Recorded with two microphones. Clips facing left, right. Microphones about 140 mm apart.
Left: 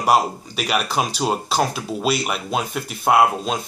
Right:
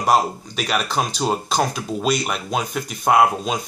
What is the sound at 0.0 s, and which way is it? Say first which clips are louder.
Speech: even; 5° left (ahead or behind).